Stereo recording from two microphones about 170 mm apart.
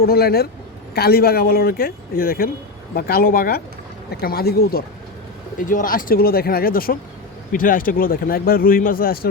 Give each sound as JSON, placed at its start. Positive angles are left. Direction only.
{"t": 0.0, "sound": "speech", "side_deg": 65}